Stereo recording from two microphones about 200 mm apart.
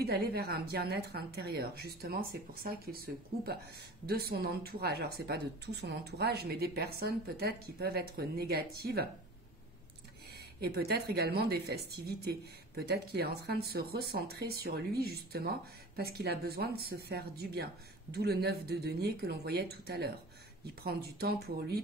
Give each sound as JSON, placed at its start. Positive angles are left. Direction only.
{"t": 0.0, "sound": "speech", "side_deg": -50}
{"t": 10.3, "sound": "speech", "side_deg": -55}